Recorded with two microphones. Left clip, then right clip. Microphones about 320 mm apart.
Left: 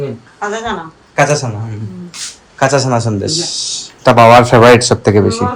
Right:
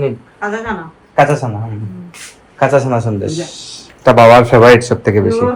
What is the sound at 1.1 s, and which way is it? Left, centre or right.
Speech, centre.